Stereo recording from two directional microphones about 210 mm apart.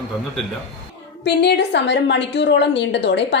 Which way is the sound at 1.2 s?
55° left (ahead or behind).